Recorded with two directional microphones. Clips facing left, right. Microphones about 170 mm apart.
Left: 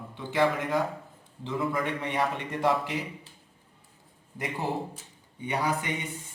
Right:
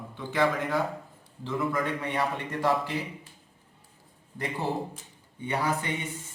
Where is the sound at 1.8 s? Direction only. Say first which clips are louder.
Even; 20° left (ahead or behind).